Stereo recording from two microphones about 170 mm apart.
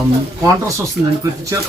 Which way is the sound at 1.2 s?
20° right (ahead or behind).